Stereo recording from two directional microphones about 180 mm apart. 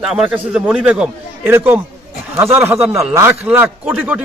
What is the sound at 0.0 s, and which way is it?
A man's voice, 5° right (ahead or behind).